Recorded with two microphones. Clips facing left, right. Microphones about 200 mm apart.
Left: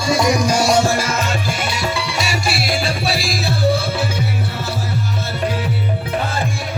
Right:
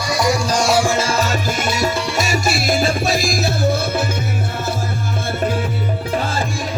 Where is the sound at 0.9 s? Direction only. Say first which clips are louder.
Right 1 dB; 30° right (ahead or behind); by 4.1 s 45° right (ahead or behind).